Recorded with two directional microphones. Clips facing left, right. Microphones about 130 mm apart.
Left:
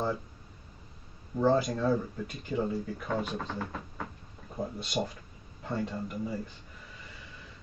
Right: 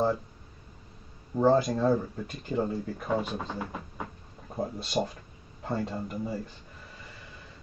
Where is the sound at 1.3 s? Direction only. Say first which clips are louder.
Right 3 dB; 30° right (ahead or behind).